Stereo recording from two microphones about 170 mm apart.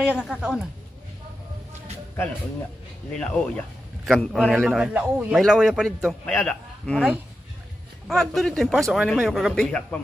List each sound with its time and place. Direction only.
0.0 s a man's voice: 5° right (ahead or behind)
3.2 s a man's voice: 5° left (ahead or behind)
8.1 s a man's voice: centre (ahead or behind)